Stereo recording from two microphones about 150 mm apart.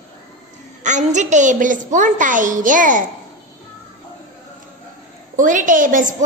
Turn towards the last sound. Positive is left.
turn(degrees=-60)  # may be behind; listen again after turning